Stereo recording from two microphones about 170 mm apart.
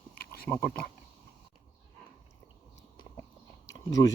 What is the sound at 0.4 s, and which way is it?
Speech, 10° left (ahead or behind).